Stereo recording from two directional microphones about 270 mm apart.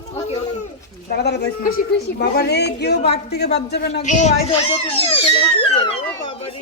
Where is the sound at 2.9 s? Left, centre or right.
Left.